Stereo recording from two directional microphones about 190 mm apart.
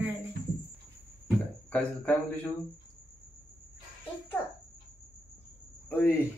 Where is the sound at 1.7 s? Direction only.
10° left (ahead or behind).